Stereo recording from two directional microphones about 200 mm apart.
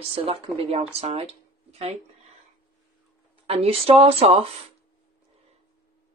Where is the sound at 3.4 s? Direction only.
30° right (ahead or behind).